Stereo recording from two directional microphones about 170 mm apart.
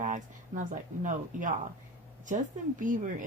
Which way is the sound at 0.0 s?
50° right (ahead or behind).